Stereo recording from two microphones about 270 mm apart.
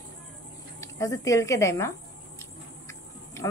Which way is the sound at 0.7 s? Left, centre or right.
Centre.